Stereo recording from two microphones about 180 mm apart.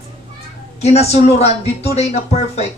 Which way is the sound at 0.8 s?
35° left (ahead or behind).